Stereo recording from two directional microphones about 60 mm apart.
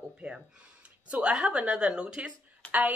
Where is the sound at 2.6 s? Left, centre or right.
Centre.